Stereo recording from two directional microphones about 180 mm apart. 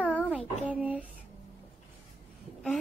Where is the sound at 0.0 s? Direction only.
10° left (ahead or behind).